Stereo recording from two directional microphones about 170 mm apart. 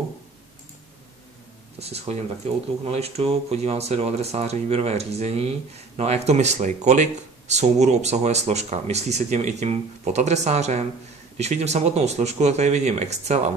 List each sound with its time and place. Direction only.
1.8 s speech: 40° right (ahead or behind)